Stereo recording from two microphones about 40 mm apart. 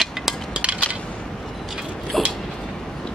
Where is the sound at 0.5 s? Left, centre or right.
Right.